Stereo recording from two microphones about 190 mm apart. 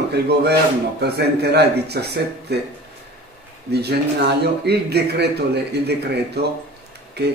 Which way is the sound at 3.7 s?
60° right (ahead or behind).